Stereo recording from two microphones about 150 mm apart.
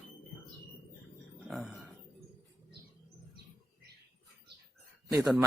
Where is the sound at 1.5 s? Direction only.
Centre (ahead or behind).